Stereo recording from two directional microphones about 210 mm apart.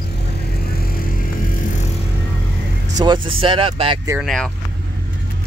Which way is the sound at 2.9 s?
20° right (ahead or behind).